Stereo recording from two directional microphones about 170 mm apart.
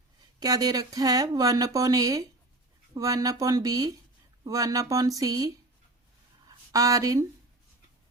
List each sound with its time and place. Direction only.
0.3 s speech: 20° right (ahead or behind)
6.7 s speech: 20° right (ahead or behind)